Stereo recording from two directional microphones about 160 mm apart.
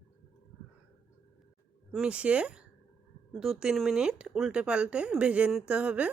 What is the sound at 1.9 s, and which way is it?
Speech, 5° right (ahead or behind).